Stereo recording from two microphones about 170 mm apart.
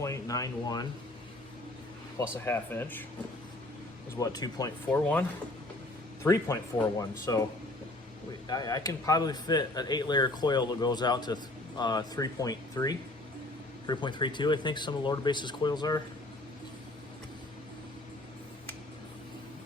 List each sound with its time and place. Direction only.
0.0 s speech: 20° left (ahead or behind)
2.1 s speech: 15° left (ahead or behind)
4.2 s speech: 25° left (ahead or behind)
4.9 s speech: 10° left (ahead or behind)
6.2 s speech: 15° left (ahead or behind)
8.4 s speech: 20° left (ahead or behind)